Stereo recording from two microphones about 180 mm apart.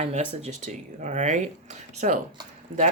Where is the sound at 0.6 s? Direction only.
40° right (ahead or behind).